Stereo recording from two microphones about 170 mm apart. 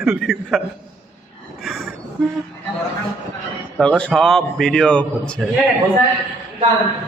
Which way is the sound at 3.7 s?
5° left (ahead or behind).